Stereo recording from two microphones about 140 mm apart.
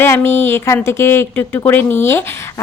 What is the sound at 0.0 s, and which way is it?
A woman's voice, 15° left (ahead or behind).